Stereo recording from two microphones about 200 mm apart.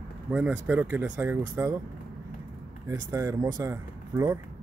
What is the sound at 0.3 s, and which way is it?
Speech, 5° right (ahead or behind).